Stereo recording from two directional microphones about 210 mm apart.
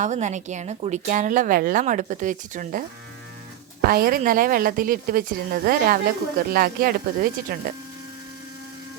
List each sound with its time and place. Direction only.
0.0 s speech: 35° right (ahead or behind)
3.8 s speech: 45° right (ahead or behind)